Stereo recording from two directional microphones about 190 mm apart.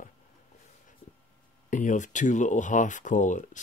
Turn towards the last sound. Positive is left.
turn(degrees=40)  # may be behind; listen again after turning